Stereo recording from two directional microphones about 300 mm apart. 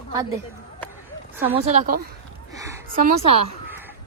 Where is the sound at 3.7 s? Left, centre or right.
Centre.